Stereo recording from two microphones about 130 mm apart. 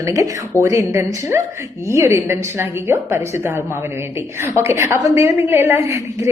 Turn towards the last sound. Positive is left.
turn(degrees=-20)  # may be behind; listen again after turning